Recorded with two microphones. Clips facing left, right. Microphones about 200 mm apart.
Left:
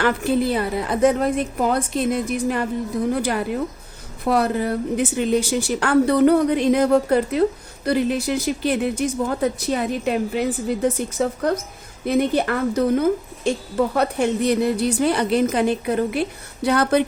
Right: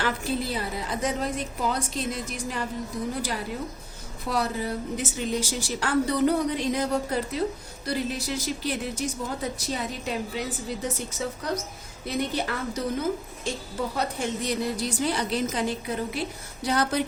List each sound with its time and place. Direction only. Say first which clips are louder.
0.0 s a woman's voice: left 9 dB; 60° left (ahead or behind)